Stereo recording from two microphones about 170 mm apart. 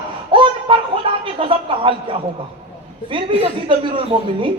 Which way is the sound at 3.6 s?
30° right (ahead or behind).